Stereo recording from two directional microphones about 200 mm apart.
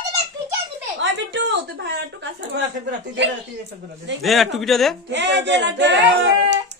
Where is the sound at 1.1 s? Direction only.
65° right (ahead or behind).